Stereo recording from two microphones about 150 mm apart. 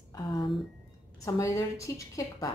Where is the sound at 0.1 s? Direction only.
30° left (ahead or behind).